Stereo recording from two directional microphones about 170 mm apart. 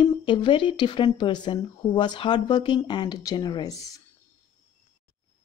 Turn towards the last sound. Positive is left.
turn(degrees=20)  # may be behind; listen again after turning